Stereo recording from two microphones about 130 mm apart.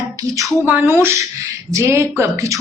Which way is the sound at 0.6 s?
15° right (ahead or behind).